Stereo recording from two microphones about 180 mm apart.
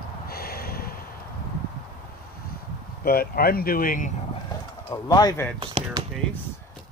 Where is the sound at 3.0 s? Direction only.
55° left (ahead or behind).